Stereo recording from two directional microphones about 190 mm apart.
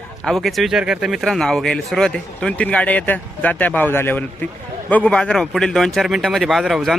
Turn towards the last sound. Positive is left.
turn(degrees=0)  # may be behind; listen again after turning